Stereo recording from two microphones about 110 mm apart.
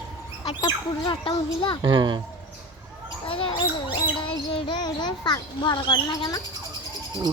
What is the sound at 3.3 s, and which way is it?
Rodents, 55° left (ahead or behind).